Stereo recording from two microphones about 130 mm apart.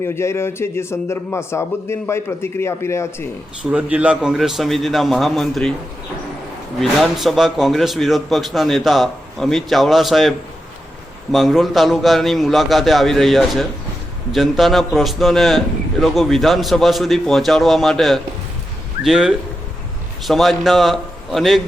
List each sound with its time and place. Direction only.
0.0 s a man's voice: 20° left (ahead or behind)
3.6 s a man's voice: 10° right (ahead or behind)
6.7 s a man's voice: centre (ahead or behind)